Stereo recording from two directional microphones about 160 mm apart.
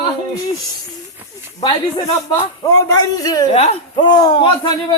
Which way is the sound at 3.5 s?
40° left (ahead or behind).